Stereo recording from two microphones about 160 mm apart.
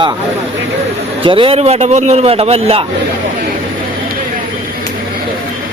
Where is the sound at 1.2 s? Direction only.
35° right (ahead or behind).